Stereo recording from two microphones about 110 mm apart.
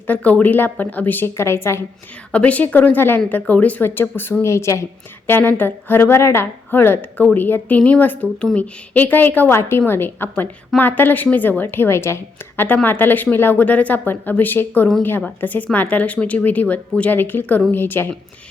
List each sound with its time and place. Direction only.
0.1 s speech: 15° left (ahead or behind)
2.3 s a woman's voice: 10° left (ahead or behind)